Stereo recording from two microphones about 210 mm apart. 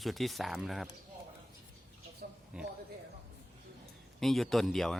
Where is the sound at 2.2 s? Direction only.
45° right (ahead or behind).